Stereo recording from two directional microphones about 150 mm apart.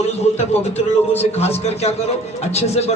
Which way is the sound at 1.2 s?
45° left (ahead or behind).